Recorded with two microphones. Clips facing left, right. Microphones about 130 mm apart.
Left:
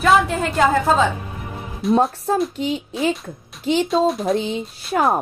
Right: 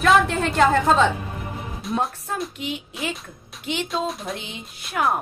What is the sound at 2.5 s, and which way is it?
Speech, 35° left (ahead or behind).